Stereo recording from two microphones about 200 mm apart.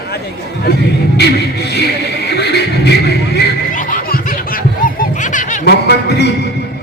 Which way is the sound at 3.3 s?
45° left (ahead or behind).